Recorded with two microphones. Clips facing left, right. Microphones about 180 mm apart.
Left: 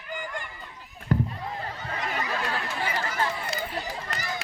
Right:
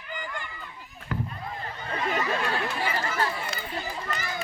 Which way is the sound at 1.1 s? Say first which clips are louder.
Left 6 dB; 40° left (ahead or behind).